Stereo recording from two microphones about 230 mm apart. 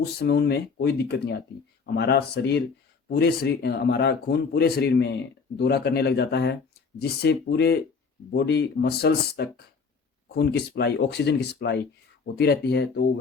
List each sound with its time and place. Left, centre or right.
0.2 s speech: left